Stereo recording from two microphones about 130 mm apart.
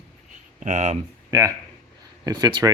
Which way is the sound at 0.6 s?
65° right (ahead or behind).